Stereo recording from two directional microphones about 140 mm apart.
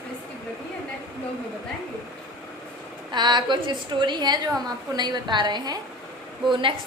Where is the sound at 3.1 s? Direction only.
35° right (ahead or behind).